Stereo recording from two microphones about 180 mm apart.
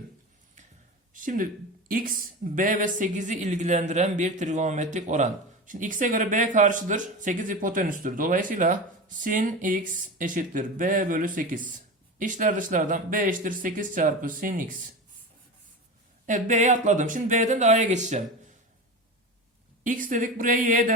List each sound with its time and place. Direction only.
1.1 s a sound: 50° right (ahead or behind)
1.9 s speech: 50° right (ahead or behind)
16.2 s speech: 45° right (ahead or behind)
19.8 s speech: 45° right (ahead or behind)